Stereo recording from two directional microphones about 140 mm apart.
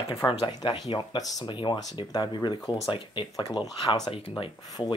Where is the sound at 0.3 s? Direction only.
35° left (ahead or behind).